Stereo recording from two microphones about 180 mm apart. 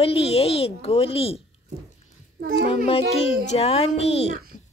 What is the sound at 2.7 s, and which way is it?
A woman's voice, 30° left (ahead or behind).